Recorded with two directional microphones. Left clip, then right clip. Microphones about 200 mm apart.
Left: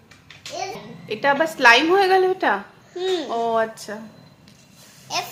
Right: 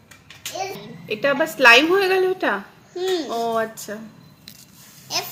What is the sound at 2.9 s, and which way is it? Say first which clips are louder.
Speech: even; 15° left (ahead or behind).